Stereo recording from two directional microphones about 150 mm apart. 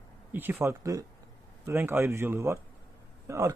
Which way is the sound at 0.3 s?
15° right (ahead or behind).